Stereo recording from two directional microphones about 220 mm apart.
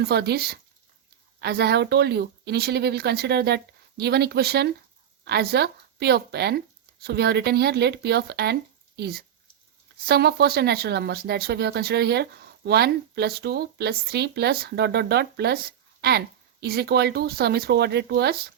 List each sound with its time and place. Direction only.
0.0 s a woman's voice: 50° right (ahead or behind)